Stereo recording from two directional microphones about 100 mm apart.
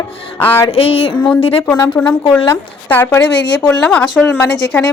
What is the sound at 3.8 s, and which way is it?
A woman's voice, 5° left (ahead or behind).